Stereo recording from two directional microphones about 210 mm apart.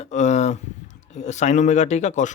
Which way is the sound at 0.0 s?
35° left (ahead or behind).